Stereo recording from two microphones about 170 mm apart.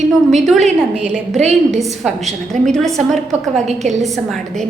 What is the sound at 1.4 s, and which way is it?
Speech, 40° right (ahead or behind).